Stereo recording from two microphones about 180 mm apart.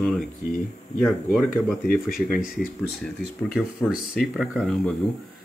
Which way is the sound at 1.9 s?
55° left (ahead or behind).